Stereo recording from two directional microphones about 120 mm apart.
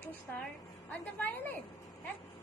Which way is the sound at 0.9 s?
15° left (ahead or behind).